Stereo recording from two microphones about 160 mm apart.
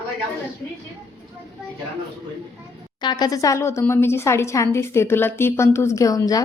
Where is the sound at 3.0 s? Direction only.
25° left (ahead or behind).